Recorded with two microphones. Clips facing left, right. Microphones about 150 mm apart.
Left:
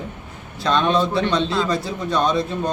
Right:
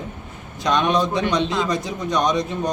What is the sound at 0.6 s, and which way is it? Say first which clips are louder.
A man's voice: left 1 dB; 15° right (ahead or behind).